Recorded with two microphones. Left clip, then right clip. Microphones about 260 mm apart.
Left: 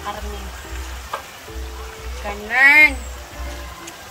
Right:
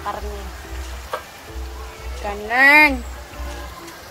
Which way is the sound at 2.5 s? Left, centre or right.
Right.